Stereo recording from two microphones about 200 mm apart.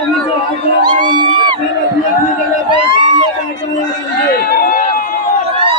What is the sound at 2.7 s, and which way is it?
Crowd, 25° right (ahead or behind).